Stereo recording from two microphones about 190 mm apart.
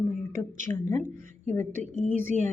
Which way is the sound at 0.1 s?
40° right (ahead or behind).